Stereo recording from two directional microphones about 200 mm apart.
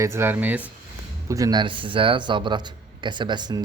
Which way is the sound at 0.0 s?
10° right (ahead or behind).